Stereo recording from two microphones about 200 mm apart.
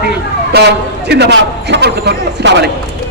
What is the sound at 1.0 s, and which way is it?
Speech, 55° right (ahead or behind).